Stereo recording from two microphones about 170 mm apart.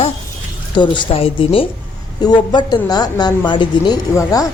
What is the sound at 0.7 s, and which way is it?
A woman's voice, 25° left (ahead or behind).